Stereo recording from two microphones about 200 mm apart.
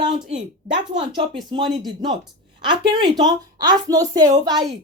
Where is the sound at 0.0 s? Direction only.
20° right (ahead or behind).